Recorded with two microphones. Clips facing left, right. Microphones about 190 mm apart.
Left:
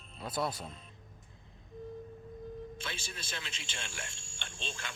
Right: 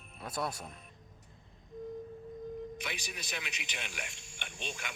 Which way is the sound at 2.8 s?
15° right (ahead or behind).